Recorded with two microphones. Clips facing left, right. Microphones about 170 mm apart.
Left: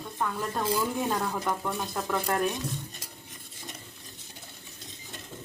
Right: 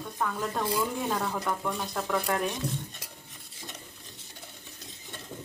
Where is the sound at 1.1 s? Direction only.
5° left (ahead or behind).